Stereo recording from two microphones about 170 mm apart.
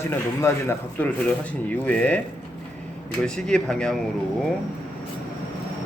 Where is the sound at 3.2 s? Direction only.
5° left (ahead or behind).